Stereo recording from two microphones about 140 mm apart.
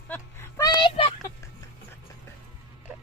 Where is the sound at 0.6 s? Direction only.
35° left (ahead or behind).